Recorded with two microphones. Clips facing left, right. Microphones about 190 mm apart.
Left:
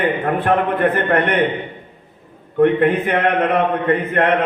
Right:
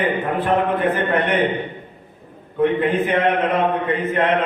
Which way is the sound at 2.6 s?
60° left (ahead or behind).